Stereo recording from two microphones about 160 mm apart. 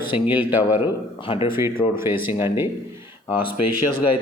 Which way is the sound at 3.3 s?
35° left (ahead or behind).